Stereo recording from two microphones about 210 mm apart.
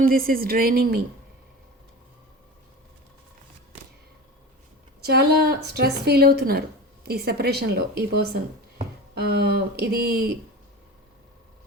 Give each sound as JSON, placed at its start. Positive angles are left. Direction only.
{"t": 0.1, "sound": "a woman's voice", "side_deg": -45}
{"t": 5.0, "sound": "a woman's voice", "side_deg": -50}